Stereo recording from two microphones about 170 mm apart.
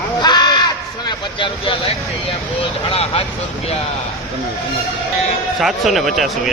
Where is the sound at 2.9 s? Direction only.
35° left (ahead or behind).